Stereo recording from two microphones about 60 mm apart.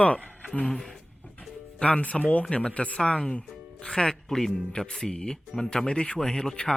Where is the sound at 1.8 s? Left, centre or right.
Centre.